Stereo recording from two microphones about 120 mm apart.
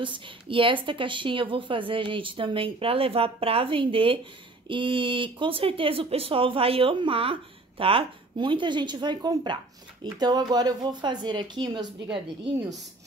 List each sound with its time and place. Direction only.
0.0 s speech: 45° right (ahead or behind)